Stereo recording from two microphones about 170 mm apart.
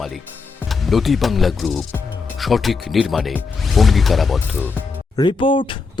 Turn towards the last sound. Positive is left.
turn(degrees=30)  # may be behind; listen again after turning